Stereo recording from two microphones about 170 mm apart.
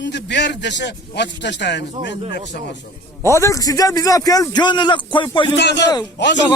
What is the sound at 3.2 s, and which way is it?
A man's voice, 15° left (ahead or behind).